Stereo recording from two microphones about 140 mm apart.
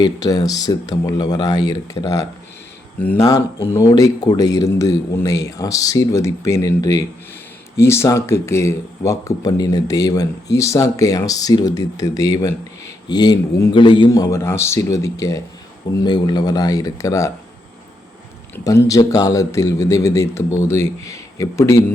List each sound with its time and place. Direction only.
0.0 s speech: 25° left (ahead or behind)
3.0 s speech: 10° left (ahead or behind)
3.7 s speech: 25° left (ahead or behind)
18.6 s speech: 25° left (ahead or behind)